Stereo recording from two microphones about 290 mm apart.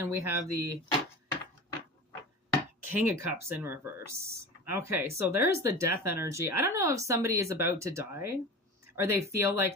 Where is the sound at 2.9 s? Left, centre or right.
Centre.